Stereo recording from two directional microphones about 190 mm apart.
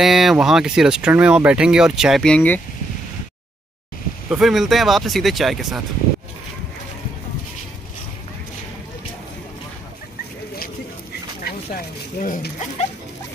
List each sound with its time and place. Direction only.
0.0 s speech: centre (ahead or behind)
4.3 s speech: centre (ahead or behind)
11.4 s a sound: 45° left (ahead or behind)